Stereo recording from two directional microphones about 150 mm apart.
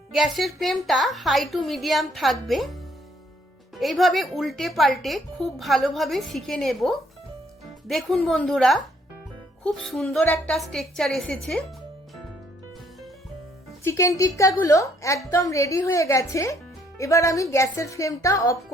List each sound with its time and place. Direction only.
0.1 s a woman's voice: centre (ahead or behind)
3.8 s a woman's voice: centre (ahead or behind)
13.8 s speech: 20° left (ahead or behind)